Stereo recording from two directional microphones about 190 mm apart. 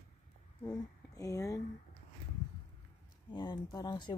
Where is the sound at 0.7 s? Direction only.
15° left (ahead or behind).